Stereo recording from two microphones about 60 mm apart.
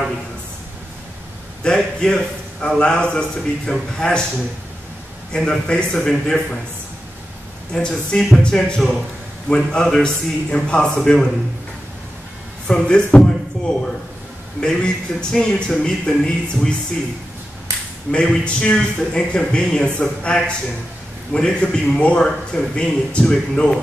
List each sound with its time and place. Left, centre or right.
1.6 s a man's voice: centre
5.3 s a man's voice: centre
7.7 s a man's voice: centre
12.6 s a man's voice: centre
13.6 s a sound: centre
14.6 s a man's voice: centre
18.1 s a man's voice: centre